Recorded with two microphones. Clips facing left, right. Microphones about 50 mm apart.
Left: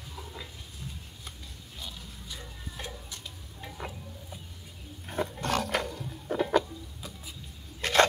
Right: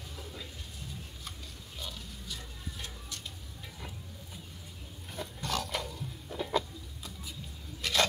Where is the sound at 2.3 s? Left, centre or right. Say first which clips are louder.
Left 2 dB; left.